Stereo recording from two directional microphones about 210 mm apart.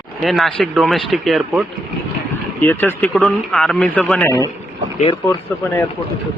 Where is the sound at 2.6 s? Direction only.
10° left (ahead or behind).